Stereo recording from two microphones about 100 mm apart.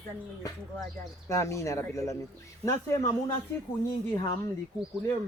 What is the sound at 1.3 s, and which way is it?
A man's voice, 30° left (ahead or behind).